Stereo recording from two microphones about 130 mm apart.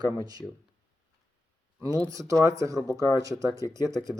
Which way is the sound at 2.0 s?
25° right (ahead or behind).